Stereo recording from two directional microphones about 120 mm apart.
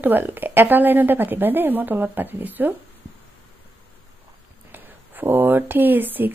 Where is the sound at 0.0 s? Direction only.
15° right (ahead or behind).